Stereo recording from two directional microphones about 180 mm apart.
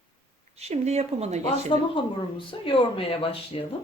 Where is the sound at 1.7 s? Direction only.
30° left (ahead or behind).